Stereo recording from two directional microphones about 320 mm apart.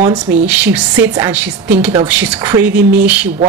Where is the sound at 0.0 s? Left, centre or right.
Right.